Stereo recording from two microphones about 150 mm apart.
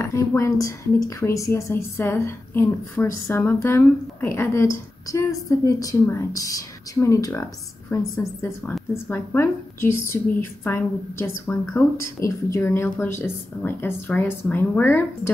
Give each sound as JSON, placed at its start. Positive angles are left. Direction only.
{"t": 0.0, "sound": "a woman's voice", "side_deg": 20}